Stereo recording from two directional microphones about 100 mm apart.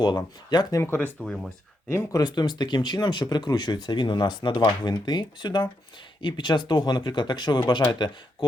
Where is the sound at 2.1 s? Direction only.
45° left (ahead or behind).